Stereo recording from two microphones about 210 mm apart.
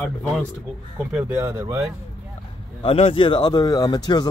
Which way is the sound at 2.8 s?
25° left (ahead or behind).